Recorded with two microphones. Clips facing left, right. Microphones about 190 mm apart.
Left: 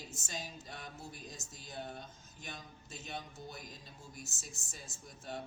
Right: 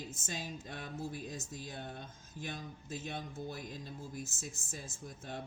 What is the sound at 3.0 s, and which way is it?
Speech, 55° right (ahead or behind).